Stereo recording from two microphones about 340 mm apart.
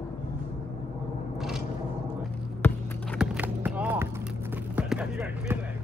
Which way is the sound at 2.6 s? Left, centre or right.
Centre.